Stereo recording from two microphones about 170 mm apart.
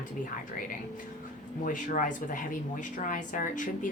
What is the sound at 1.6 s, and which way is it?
Speech, 50° left (ahead or behind).